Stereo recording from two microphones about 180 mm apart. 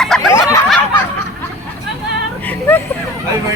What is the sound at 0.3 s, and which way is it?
Snicker, 15° left (ahead or behind).